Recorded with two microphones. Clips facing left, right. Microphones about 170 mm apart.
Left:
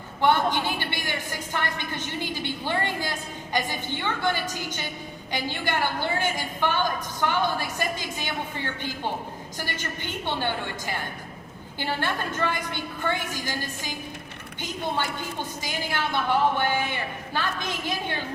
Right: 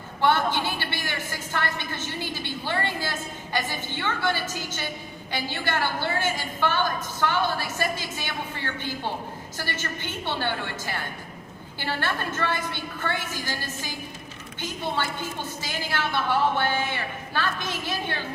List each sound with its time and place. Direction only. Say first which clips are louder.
0.2 s a woman's voice: left 1 dB; 15° left (ahead or behind)
15.6 s a woman's voice: even; 15° left (ahead or behind)